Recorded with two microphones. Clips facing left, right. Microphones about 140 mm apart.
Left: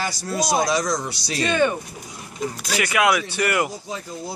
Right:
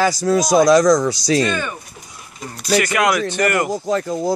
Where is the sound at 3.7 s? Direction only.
90° right.